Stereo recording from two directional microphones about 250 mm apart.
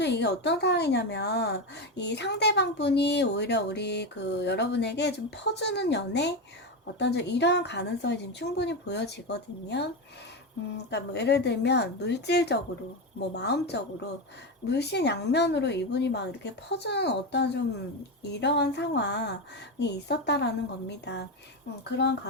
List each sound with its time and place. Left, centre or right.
0.0 s a woman's voice: left